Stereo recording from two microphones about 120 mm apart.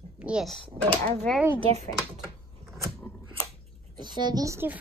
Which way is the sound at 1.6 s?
65° right (ahead or behind).